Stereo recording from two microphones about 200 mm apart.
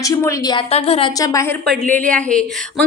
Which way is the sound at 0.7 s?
30° left (ahead or behind).